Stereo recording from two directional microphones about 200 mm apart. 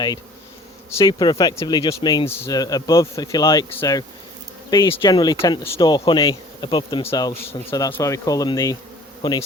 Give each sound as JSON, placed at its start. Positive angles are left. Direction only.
{"t": 0.9, "sound": "speech", "side_deg": 20}